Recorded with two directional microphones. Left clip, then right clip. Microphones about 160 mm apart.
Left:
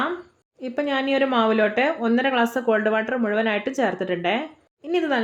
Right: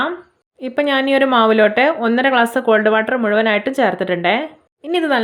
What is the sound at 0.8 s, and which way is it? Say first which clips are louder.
A woman's voice: right 7 dB; 35° right (ahead or behind).